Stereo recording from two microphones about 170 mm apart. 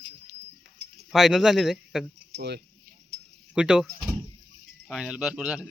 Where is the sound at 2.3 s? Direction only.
75° right (ahead or behind).